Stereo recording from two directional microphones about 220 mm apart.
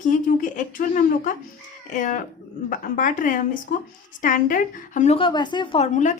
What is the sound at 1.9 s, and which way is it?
A woman's voice, 35° left (ahead or behind).